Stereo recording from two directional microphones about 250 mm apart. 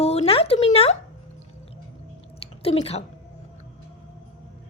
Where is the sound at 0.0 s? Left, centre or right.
Left.